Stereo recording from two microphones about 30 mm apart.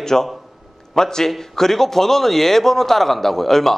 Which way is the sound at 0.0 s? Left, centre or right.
Centre.